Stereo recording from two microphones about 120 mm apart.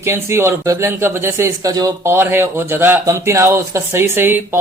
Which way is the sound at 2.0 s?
20° right (ahead or behind).